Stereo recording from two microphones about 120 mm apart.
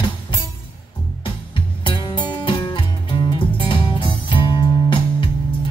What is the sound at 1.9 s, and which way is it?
Music, 45° left (ahead or behind).